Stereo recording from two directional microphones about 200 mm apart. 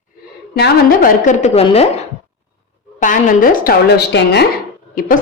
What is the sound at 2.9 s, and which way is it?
A woman's voice, 40° left (ahead or behind).